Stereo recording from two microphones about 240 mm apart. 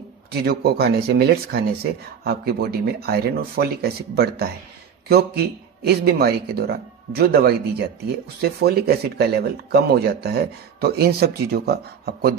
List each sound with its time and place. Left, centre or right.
0.3 s speech: right